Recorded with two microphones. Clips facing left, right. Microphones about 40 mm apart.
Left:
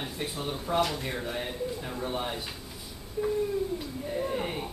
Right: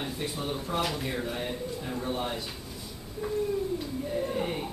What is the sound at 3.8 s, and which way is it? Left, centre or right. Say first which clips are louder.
Speech: right 1 dB; centre.